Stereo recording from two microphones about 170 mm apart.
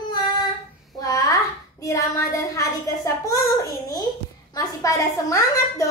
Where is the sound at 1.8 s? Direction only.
20° left (ahead or behind).